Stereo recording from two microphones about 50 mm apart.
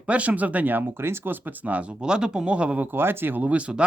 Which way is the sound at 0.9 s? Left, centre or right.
Right.